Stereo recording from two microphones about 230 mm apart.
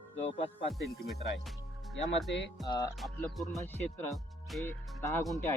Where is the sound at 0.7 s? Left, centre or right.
Centre.